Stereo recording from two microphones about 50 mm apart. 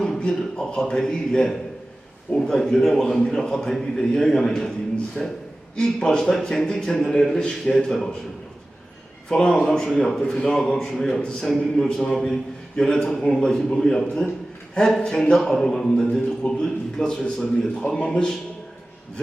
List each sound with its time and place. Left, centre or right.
0.2 s a man's voice: centre
5.2 s a man's voice: left
9.3 s a man's voice: centre
11.2 s a man's voice: centre